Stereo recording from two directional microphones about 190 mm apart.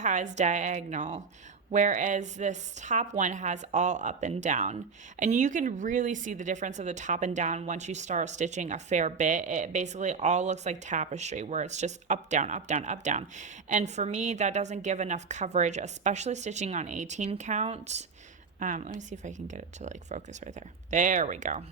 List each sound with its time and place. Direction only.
0.0 s speech: 40° right (ahead or behind)